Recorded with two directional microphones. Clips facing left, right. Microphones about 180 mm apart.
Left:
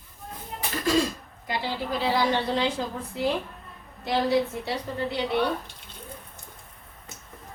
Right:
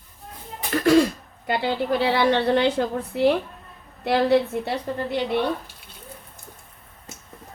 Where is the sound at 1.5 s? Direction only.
65° right (ahead or behind).